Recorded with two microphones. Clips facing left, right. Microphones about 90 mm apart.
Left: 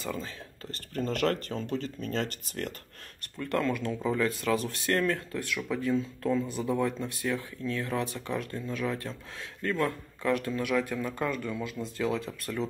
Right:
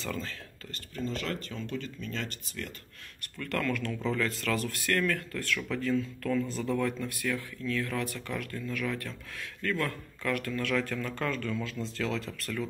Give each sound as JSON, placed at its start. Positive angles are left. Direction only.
{"t": 0.0, "sound": "speech", "side_deg": 15}
{"t": 0.9, "sound": "speech", "side_deg": 50}
{"t": 3.3, "sound": "speech", "side_deg": 25}